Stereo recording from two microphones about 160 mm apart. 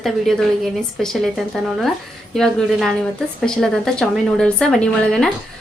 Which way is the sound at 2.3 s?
Centre (ahead or behind).